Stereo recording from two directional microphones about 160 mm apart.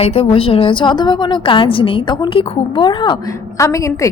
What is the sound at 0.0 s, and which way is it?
A woman's voice, 35° left (ahead or behind).